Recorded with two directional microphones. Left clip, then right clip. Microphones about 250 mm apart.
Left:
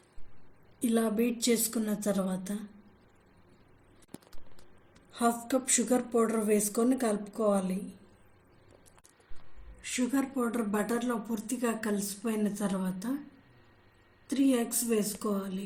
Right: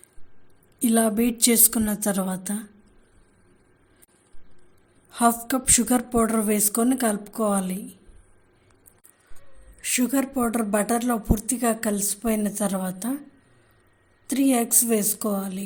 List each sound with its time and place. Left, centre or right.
0.8 s speech: right
5.7 s speech: right
9.8 s speech: right
14.3 s speech: right